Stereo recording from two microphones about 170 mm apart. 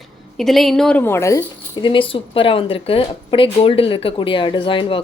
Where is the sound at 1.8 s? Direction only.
30° left (ahead or behind).